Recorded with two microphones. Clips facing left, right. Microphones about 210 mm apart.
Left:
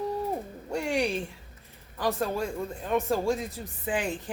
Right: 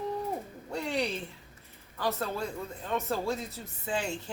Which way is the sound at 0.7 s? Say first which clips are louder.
Left 4 dB; 15° left (ahead or behind).